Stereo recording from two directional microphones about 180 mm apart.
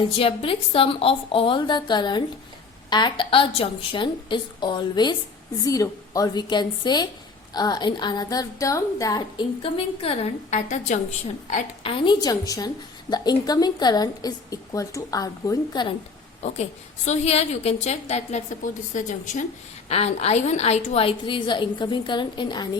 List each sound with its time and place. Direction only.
0.2 s a woman's voice: 30° left (ahead or behind)
9.7 s a woman's voice: 30° left (ahead or behind)
17.1 s a woman's voice: 35° left (ahead or behind)